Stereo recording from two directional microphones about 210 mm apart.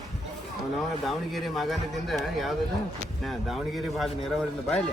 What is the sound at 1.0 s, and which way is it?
Speech, centre (ahead or behind).